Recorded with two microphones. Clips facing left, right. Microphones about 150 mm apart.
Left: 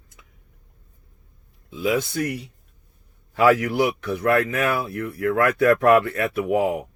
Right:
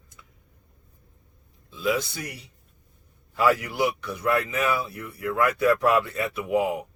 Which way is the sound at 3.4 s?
65° left (ahead or behind).